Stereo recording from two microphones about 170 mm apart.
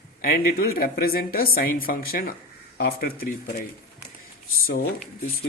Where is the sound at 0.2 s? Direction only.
60° left (ahead or behind).